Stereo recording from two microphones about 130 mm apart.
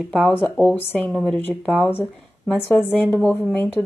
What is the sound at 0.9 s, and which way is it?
Speech, 10° left (ahead or behind).